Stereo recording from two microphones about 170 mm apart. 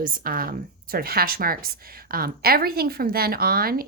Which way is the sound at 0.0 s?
55° right (ahead or behind).